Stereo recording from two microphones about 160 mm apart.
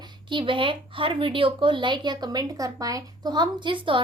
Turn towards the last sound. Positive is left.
turn(degrees=-30)  # may be behind; listen again after turning